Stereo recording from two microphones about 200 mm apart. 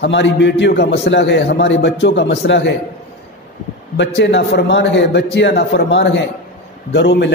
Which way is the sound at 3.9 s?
60° left (ahead or behind).